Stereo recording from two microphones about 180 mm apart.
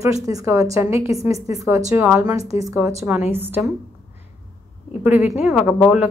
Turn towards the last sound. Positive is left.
turn(degrees=0)  # may be behind; listen again after turning